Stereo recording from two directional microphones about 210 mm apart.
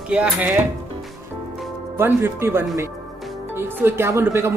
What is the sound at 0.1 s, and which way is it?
Speech, 5° right (ahead or behind).